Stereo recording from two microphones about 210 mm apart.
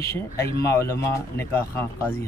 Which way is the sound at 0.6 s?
15° left (ahead or behind).